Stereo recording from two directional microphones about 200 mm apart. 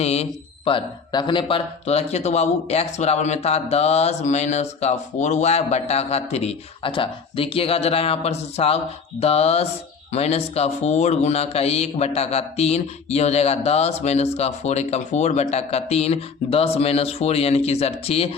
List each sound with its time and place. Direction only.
0.0 s a man's voice: 30° left (ahead or behind)